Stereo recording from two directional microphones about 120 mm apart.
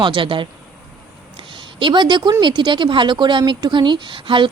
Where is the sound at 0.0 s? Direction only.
40° right (ahead or behind).